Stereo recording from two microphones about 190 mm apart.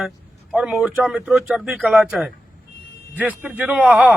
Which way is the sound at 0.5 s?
5° right (ahead or behind).